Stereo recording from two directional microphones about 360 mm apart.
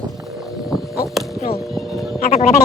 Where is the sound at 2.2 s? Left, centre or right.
Centre.